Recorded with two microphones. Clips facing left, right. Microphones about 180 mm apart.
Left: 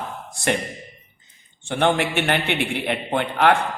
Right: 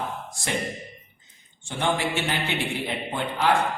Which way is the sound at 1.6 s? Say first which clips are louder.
Left 5 dB; 65° left (ahead or behind).